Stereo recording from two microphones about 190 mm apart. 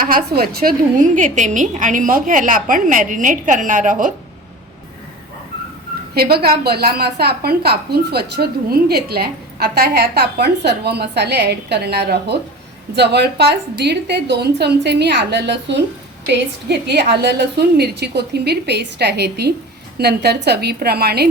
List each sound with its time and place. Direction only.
0.0 s a woman's voice: 50° right (ahead or behind)
6.1 s a woman's voice: 55° right (ahead or behind)